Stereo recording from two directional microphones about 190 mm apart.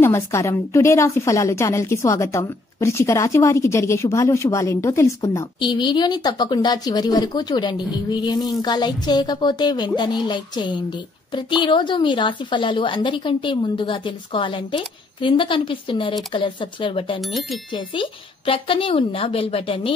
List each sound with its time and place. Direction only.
0.0 s a woman's voice: 15° left (ahead or behind)
17.2 s speech: centre (ahead or behind)
17.7 s a woman's voice: 25° left (ahead or behind)